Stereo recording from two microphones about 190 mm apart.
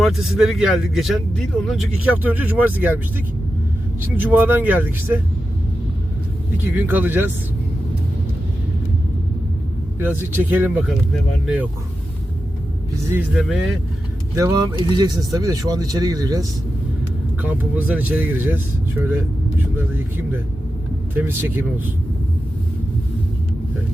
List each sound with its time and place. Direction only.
0.0 s a man's voice: centre (ahead or behind)
4.0 s speech: 10° right (ahead or behind)
6.7 s speech: 10° right (ahead or behind)
10.0 s speech: 10° right (ahead or behind)
13.3 s a man's voice: centre (ahead or behind)
14.3 s speech: 20° right (ahead or behind)
17.4 s speech: 10° right (ahead or behind)